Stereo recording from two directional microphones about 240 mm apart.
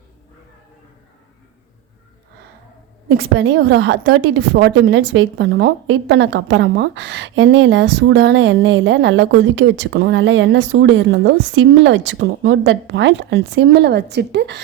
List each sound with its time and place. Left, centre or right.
3.2 s a woman's voice: right